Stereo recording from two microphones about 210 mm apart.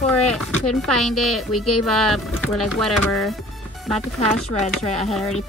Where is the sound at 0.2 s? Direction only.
90° left.